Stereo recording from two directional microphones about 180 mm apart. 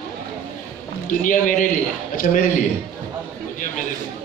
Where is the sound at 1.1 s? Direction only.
45° left (ahead or behind).